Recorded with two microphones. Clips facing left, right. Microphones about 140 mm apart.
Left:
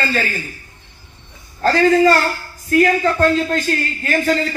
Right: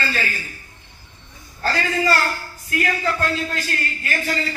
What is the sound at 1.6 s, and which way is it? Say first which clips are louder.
A man's voice: left 10 dB; 45° left (ahead or behind).